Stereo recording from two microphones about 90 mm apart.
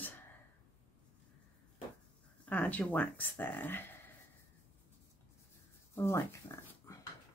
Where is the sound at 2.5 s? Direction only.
15° left (ahead or behind).